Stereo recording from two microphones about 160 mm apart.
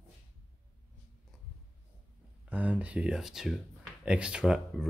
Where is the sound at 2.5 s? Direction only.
10° right (ahead or behind).